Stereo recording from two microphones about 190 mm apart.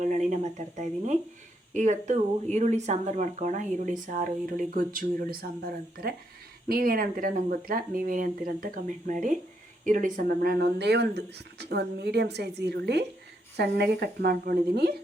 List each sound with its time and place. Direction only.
0.0 s speech: 40° right (ahead or behind)